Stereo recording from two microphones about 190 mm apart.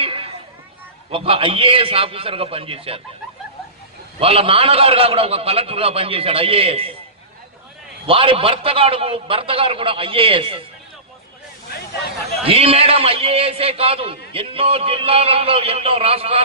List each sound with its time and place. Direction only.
0.0 s chatter: 30° right (ahead or behind)
1.1 s a man's voice: 30° right (ahead or behind)
4.2 s a man's voice: 30° right (ahead or behind)
8.1 s a man's voice: 30° right (ahead or behind)
12.4 s a man's voice: 30° right (ahead or behind)